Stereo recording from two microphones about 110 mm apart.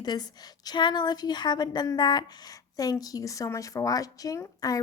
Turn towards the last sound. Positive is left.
turn(degrees=35)  # may be behind; listen again after turning